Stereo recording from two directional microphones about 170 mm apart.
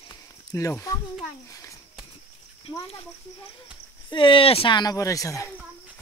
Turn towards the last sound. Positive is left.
turn(degrees=15)  # may be behind; listen again after turning